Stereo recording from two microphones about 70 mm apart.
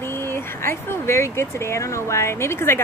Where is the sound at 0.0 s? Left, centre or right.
Left.